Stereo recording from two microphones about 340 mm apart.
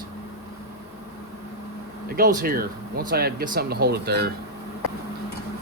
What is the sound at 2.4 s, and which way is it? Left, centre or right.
Speech, right.